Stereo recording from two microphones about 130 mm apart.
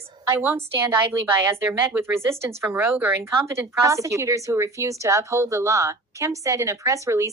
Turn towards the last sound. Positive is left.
turn(degrees=-25)  # may be behind; listen again after turning